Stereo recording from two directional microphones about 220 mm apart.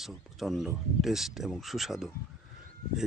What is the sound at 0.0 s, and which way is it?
Speech, centre (ahead or behind).